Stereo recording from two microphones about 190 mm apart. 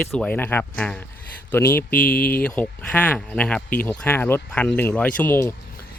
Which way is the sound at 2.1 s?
50° left (ahead or behind).